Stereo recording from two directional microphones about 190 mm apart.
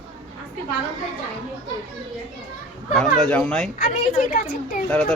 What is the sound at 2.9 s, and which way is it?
Speech, 5° left (ahead or behind).